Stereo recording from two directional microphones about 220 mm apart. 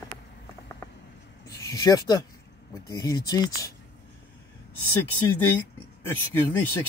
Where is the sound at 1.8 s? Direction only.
15° left (ahead or behind).